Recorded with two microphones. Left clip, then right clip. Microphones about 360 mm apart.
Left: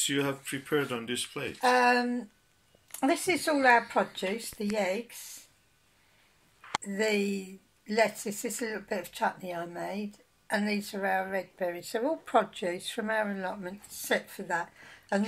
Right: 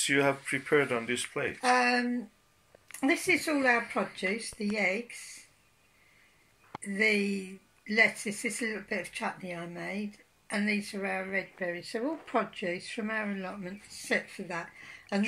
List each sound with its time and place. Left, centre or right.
0.0 s speech: centre
1.7 s speech: left
7.0 s speech: left